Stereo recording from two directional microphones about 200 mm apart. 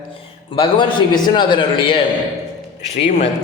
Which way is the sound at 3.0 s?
40° left (ahead or behind).